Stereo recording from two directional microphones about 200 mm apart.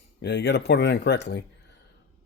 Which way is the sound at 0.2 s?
60° left (ahead or behind).